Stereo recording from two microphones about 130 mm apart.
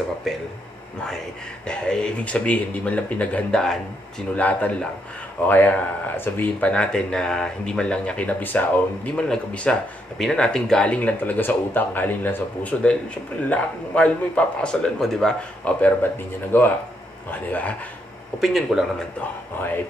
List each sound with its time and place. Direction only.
1.7 s speech: 5° left (ahead or behind)
18.4 s speech: centre (ahead or behind)